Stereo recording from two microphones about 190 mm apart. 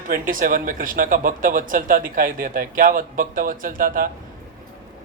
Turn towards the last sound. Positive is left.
turn(degrees=-50)  # may be behind; listen again after turning